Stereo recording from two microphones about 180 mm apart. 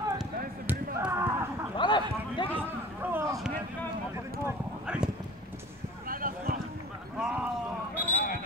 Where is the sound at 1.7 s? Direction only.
25° left (ahead or behind).